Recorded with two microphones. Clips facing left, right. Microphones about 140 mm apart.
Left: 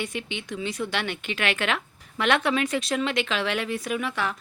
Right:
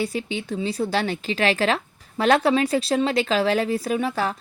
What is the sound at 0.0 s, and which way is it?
A woman's voice, 35° right (ahead or behind).